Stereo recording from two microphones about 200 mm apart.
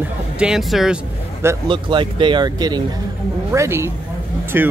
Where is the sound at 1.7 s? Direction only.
25° right (ahead or behind).